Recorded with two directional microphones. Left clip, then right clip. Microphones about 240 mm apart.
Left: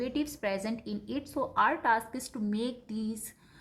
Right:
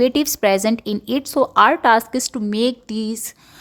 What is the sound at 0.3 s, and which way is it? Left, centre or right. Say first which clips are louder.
A woman's voice: right 17 dB; right.